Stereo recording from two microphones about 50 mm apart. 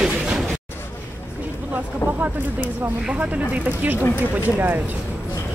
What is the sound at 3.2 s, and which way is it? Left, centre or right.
Speech, right.